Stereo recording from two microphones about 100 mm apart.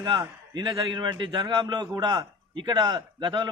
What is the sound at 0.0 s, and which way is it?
A man's voice, 45° right (ahead or behind).